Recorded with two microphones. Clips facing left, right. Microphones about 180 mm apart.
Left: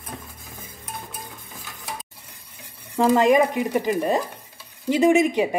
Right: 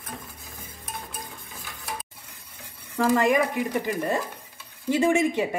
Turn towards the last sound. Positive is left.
turn(degrees=15)  # may be behind; listen again after turning